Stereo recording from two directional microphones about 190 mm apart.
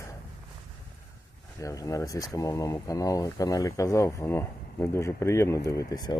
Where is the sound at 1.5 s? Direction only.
15° left (ahead or behind).